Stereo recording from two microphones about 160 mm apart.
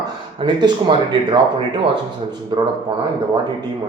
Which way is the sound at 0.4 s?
30° right (ahead or behind).